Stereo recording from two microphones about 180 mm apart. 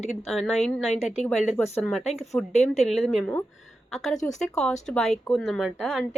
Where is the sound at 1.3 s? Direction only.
Centre (ahead or behind).